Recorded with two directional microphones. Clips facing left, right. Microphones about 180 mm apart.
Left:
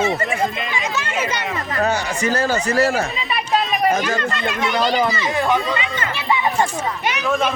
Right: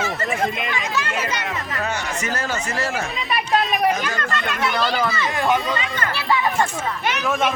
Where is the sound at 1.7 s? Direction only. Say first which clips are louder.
Left 8 dB; 35° left (ahead or behind).